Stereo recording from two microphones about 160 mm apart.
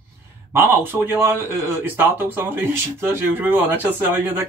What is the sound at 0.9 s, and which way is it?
Speech, 15° right (ahead or behind).